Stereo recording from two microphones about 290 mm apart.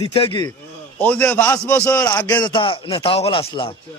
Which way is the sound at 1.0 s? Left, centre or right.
Centre.